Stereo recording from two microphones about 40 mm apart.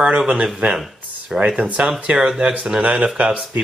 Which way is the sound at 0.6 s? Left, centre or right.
Right.